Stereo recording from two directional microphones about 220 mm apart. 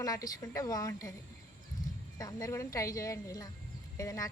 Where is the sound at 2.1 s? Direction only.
15° left (ahead or behind).